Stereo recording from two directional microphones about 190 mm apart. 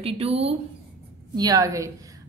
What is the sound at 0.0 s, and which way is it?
Speech, 30° right (ahead or behind).